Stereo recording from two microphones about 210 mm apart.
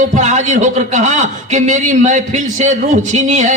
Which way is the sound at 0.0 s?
35° right (ahead or behind).